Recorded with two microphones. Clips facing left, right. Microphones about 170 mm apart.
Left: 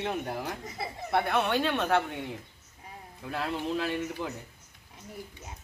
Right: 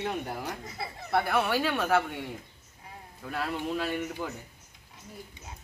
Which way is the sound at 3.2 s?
Centre (ahead or behind).